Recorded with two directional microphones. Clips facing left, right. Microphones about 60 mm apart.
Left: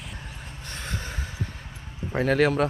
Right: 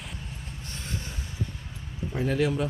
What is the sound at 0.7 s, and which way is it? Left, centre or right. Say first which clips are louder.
Train: left 4 dB; left.